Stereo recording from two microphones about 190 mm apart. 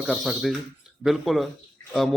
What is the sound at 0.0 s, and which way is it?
A man's voice, centre (ahead or behind).